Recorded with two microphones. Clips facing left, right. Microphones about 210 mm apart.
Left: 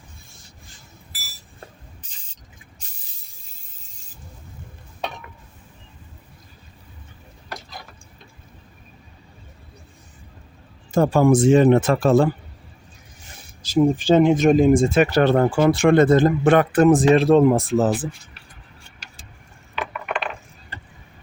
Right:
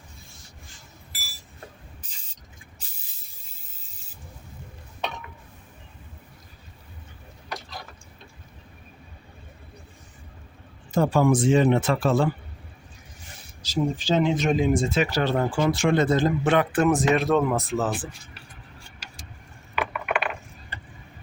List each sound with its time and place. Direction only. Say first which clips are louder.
10.9 s speech: left 4 dB; 50° left (ahead or behind)
13.6 s speech: left 8 dB; 55° left (ahead or behind); by 17.9 s 35° left (ahead or behind)
19.7 s mechanisms: right 1 dB; 10° right (ahead or behind)